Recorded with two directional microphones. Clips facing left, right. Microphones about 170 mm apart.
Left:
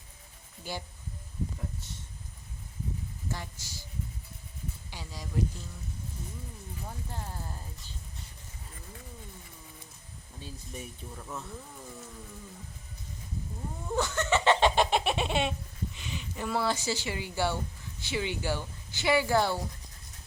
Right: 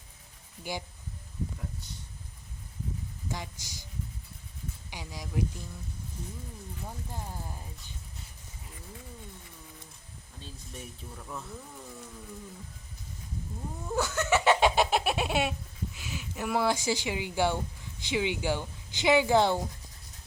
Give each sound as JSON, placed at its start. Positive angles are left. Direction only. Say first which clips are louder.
{"t": 0.6, "sound": "speech", "louder": "right 2 dB", "side_deg": -15}
{"t": 1.8, "sound": "speech", "louder": "even", "side_deg": 0}
{"t": 3.2, "sound": "speech", "louder": "right 1 dB", "side_deg": -15}
{"t": 4.9, "sound": "speech", "louder": "right 4 dB", "side_deg": -15}
{"t": 6.8, "sound": "speech", "louder": "even", "side_deg": -10}
{"t": 10.4, "sound": "speech", "louder": "left 2 dB", "side_deg": 5}
{"t": 13.8, "sound": "a sound", "louder": "even", "side_deg": -5}
{"t": 16.0, "sound": "speech", "louder": "right 2 dB", "side_deg": -5}